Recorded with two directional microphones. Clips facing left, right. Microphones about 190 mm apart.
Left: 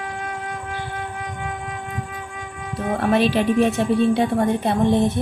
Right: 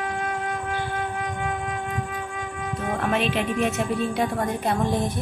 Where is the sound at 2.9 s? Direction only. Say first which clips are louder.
Left 6 dB; 35° left (ahead or behind).